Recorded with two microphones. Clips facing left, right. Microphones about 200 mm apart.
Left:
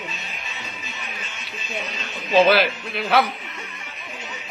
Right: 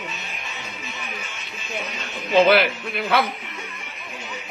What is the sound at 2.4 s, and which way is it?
Speech, 20° right (ahead or behind).